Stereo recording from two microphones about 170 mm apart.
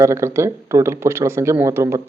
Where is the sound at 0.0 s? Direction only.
15° right (ahead or behind).